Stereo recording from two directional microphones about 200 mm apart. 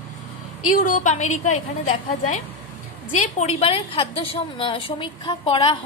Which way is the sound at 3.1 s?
35° left (ahead or behind).